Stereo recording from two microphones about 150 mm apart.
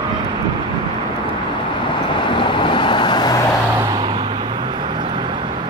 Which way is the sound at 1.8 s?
30° left (ahead or behind).